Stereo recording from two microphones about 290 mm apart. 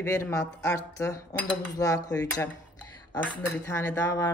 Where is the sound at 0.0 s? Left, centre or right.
Centre.